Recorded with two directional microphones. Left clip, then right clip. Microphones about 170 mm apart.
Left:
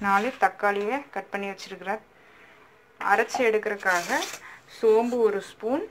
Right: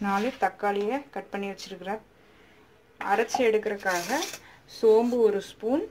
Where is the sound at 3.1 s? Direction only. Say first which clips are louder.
Left 1 dB; 20° right (ahead or behind).